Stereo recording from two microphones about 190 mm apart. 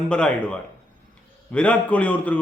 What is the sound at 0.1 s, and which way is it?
A man's voice, 5° left (ahead or behind).